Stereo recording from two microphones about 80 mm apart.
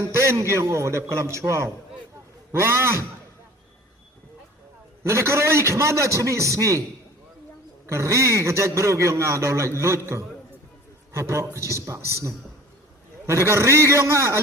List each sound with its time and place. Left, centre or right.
0.0 s a man's voice: right
5.0 s a man's voice: right
7.9 s a man's voice: right